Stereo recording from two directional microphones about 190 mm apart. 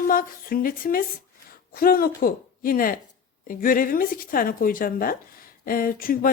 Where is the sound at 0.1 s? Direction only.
50° left (ahead or behind).